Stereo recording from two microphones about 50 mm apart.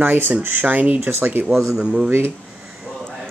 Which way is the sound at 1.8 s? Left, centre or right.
Centre.